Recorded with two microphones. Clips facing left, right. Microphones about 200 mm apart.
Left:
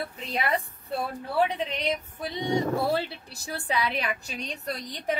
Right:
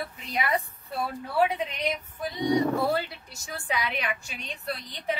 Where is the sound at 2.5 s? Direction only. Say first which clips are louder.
Right 1 dB; 30° left (ahead or behind).